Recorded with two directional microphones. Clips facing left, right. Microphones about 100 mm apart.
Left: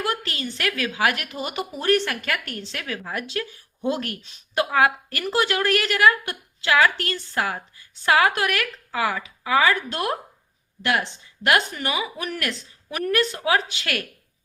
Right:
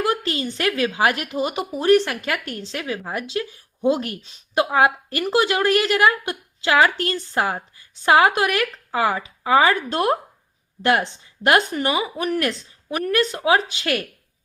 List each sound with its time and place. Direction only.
0.0 s a sound: 25° right (ahead or behind)
0.4 s speech: 30° right (ahead or behind)
11.4 s speech: 30° right (ahead or behind)